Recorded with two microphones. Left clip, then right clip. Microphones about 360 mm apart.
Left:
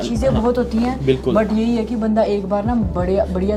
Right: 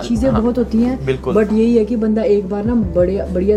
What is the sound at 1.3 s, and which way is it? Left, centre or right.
A woman's voice, left.